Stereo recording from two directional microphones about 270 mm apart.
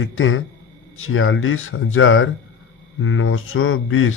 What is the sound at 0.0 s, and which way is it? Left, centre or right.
Speech, left.